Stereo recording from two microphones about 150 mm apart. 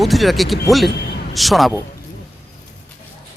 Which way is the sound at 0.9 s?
90° left.